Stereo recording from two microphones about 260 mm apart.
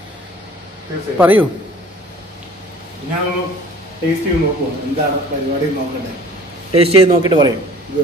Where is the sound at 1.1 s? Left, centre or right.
Centre.